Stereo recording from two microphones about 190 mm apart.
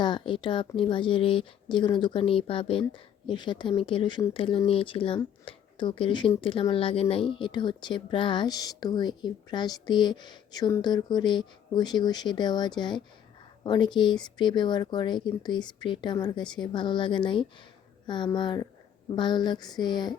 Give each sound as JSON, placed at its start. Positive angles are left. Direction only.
{"t": 0.0, "sound": "speech", "side_deg": 25}